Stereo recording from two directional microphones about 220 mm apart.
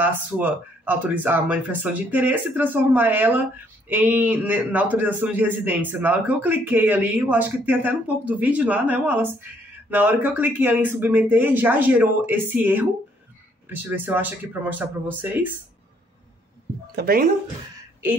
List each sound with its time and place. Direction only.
0.0 s speech: 10° right (ahead or behind)
16.9 s speech: 45° right (ahead or behind)